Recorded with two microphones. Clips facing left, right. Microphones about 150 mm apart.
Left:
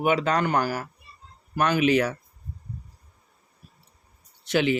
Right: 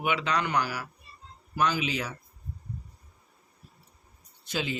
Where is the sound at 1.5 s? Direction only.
60° left (ahead or behind).